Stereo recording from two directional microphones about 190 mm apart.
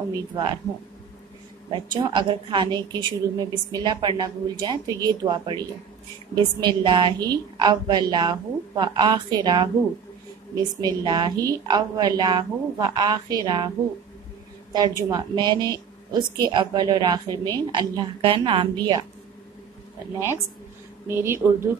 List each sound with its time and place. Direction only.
0.1 s a woman's voice: 25° right (ahead or behind)
1.7 s a woman's voice: 25° right (ahead or behind)
14.7 s a woman's voice: 20° right (ahead or behind)
21.1 s speech: 10° right (ahead or behind)